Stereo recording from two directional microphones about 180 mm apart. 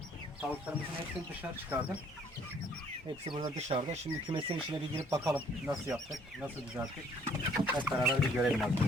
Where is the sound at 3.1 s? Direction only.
30° right (ahead or behind).